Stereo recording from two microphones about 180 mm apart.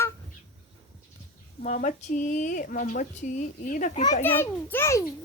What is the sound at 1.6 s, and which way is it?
Speech, 40° left (ahead or behind).